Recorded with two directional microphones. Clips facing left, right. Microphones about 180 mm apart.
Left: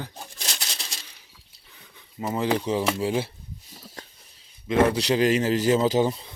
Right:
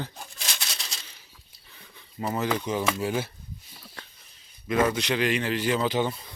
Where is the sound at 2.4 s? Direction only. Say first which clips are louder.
Left 4 dB; 30° left (ahead or behind).